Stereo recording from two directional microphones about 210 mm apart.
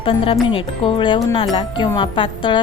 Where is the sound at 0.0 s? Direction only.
25° left (ahead or behind).